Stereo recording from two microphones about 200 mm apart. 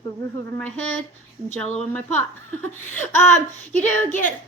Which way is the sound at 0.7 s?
75° right (ahead or behind).